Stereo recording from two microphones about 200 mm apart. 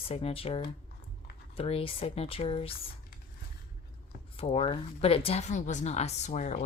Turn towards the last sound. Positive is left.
turn(degrees=35)  # may be behind; listen again after turning